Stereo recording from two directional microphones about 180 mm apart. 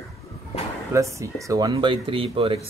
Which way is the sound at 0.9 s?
15° right (ahead or behind).